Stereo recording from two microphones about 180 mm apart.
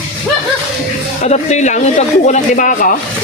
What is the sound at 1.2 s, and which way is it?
Speech, 40° left (ahead or behind).